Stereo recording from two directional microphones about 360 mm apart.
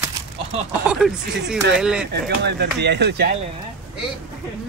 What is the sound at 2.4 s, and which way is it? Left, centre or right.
Speech, right.